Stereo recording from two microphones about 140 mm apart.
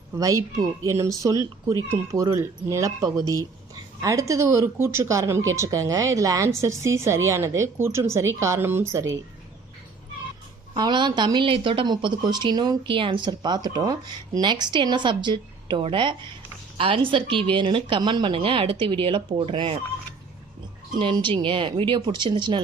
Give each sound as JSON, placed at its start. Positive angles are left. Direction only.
{"t": 0.2, "sound": "speech", "side_deg": -25}
{"t": 10.8, "sound": "speech", "side_deg": -30}
{"t": 21.0, "sound": "speech", "side_deg": -35}